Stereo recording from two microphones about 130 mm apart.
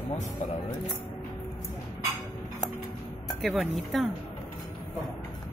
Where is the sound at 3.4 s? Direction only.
Centre (ahead or behind).